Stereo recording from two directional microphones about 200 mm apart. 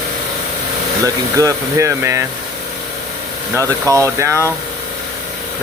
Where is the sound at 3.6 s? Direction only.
15° right (ahead or behind).